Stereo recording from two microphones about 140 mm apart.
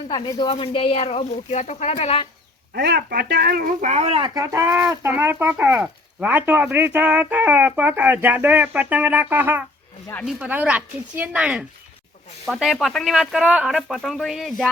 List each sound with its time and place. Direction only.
0.1 s speech: 30° left (ahead or behind)
3.1 s speech: 90° right; by 4.2 s 55° right (ahead or behind)
4.2 s speech: 25° right (ahead or behind); by 14.7 s centre (ahead or behind)